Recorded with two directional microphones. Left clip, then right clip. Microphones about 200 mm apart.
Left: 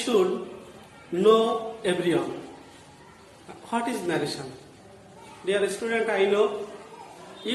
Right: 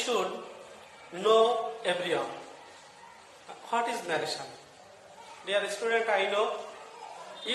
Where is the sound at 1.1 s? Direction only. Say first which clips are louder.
Left 3 dB; 5° right (ahead or behind).